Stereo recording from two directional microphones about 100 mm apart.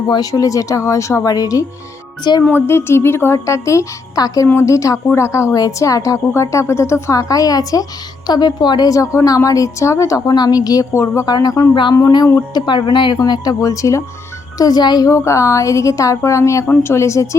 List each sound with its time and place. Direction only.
0.1 s a woman's voice: 40° left (ahead or behind)
2.4 s a woman's voice: 25° left (ahead or behind); by 11.6 s 40° left (ahead or behind)
11.7 s speech: 50° left (ahead or behind)
11.9 s a woman's voice: 35° left (ahead or behind)